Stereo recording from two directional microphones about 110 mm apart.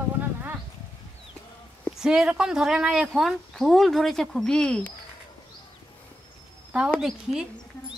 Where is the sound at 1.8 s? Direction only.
5° right (ahead or behind).